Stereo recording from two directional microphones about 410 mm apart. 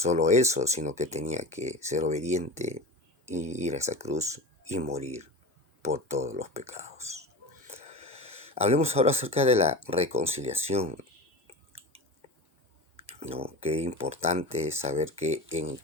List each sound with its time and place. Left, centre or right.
0.0 s speech: centre
13.1 s speech: centre